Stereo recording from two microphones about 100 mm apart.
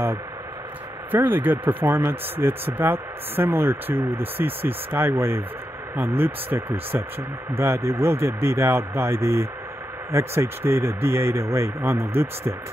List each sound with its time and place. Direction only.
1.1 s speech: 20° right (ahead or behind)